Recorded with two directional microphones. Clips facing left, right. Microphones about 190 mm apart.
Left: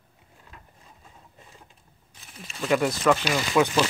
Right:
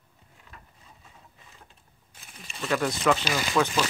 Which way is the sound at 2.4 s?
Centre (ahead or behind).